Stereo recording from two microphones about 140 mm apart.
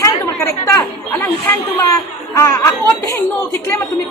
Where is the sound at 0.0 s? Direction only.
25° left (ahead or behind).